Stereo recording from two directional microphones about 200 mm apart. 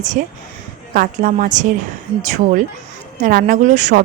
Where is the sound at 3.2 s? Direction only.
40° right (ahead or behind).